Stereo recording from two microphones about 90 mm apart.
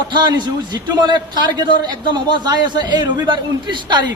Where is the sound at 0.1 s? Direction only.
55° right (ahead or behind).